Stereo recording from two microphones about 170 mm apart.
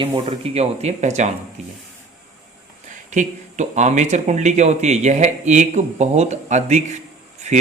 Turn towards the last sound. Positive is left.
turn(degrees=-45)  # may be behind; listen again after turning